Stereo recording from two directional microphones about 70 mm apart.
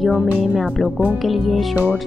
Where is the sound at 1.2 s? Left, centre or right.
Centre.